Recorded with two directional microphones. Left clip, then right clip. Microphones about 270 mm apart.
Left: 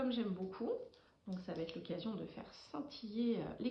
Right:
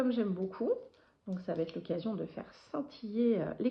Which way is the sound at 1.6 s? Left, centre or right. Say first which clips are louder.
Right 7 dB; centre.